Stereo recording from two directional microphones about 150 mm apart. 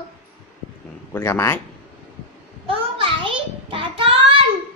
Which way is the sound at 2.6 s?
35° right (ahead or behind).